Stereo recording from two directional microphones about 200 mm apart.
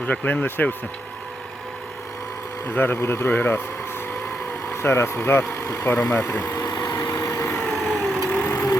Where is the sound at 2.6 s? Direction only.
10° left (ahead or behind).